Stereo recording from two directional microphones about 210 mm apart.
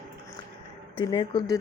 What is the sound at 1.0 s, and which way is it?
Speech, 20° left (ahead or behind).